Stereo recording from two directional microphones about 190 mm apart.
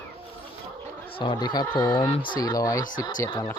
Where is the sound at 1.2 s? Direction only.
25° left (ahead or behind).